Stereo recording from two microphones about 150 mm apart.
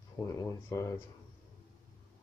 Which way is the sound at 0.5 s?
20° left (ahead or behind).